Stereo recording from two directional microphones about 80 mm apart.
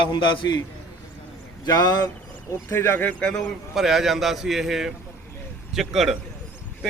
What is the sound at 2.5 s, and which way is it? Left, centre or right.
Speech, left.